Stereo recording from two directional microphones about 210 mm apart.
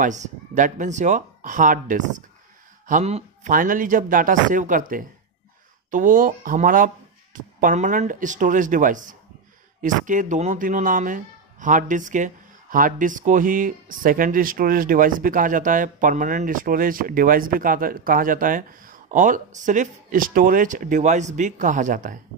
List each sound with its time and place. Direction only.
0.0 s speech: 35° right (ahead or behind)